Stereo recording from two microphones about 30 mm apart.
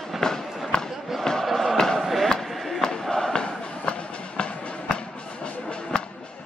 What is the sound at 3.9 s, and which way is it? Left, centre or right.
Music, left.